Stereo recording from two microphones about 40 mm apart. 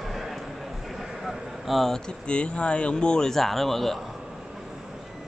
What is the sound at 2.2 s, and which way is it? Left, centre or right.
Speech, left.